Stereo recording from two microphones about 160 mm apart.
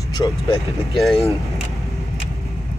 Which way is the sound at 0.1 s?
25° left (ahead or behind).